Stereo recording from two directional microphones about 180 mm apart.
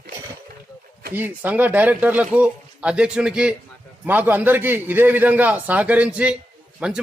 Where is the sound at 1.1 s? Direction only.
10° right (ahead or behind).